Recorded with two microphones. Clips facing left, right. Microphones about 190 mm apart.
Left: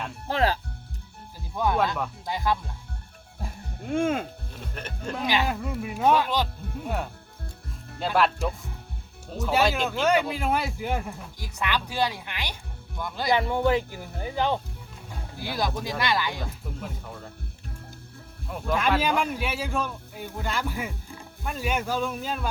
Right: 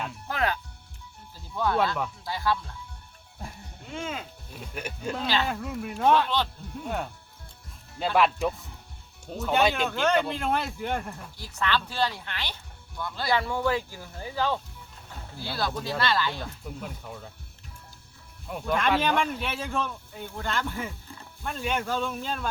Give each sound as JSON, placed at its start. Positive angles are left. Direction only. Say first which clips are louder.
{"t": 0.3, "sound": "music", "louder": "left 5 dB", "side_deg": 30}
{"t": 1.5, "sound": "speech", "louder": "left 1 dB", "side_deg": 15}
{"t": 3.8, "sound": "speech", "louder": "left 10 dB", "side_deg": 55}
{"t": 4.7, "sound": "speech", "louder": "right 2 dB", "side_deg": -10}
{"t": 5.1, "sound": "speech", "louder": "left 2 dB", "side_deg": 15}
{"t": 5.5, "sound": "a man's voice", "louder": "left 2 dB", "side_deg": 5}
{"t": 18.4, "sound": "a man's voice", "louder": "left 1 dB", "side_deg": 0}